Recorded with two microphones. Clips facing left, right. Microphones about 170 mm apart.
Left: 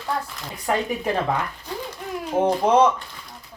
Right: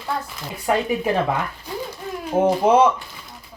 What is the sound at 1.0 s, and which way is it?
Speech, 5° right (ahead or behind).